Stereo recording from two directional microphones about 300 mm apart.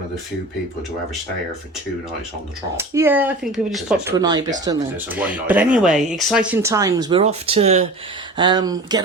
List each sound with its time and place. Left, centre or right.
2.7 s speech: centre
4.2 s speech: centre